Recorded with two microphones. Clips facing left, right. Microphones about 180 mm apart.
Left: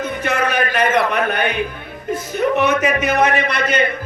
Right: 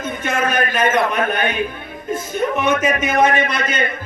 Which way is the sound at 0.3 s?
70° left (ahead or behind).